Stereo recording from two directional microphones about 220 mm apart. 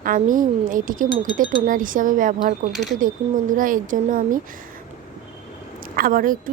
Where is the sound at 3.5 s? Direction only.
35° right (ahead or behind).